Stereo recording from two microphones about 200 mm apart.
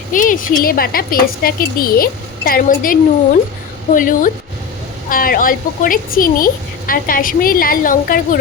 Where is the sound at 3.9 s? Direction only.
40° left (ahead or behind).